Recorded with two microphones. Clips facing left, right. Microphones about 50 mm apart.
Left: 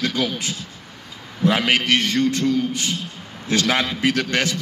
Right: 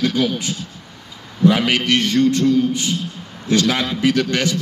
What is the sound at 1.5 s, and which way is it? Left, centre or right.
A man's voice, left.